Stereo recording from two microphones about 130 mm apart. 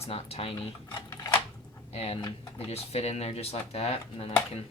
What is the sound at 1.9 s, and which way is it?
Speech, 50° left (ahead or behind).